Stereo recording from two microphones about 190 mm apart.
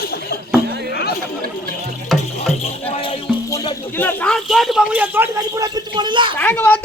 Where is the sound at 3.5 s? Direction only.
25° left (ahead or behind).